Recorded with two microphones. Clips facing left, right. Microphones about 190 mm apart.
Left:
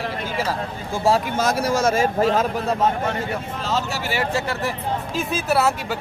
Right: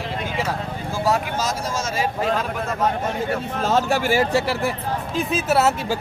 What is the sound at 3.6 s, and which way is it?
Speech, 50° right (ahead or behind).